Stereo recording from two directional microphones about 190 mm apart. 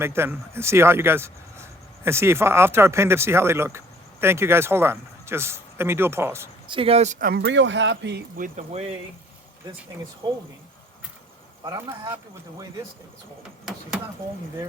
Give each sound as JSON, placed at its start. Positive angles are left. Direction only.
{"t": 0.0, "sound": "speech", "side_deg": -10}
{"t": 6.7, "sound": "speech", "side_deg": -30}
{"t": 8.4, "sound": "speech", "side_deg": -40}
{"t": 11.6, "sound": "speech", "side_deg": -15}